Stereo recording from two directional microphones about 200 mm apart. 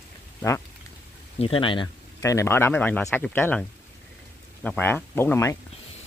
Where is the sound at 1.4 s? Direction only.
25° left (ahead or behind).